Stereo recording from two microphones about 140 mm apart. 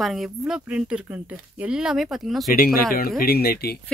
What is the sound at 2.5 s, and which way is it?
Speech, 90° left.